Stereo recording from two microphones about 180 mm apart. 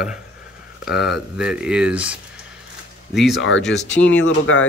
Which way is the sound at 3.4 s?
90° left.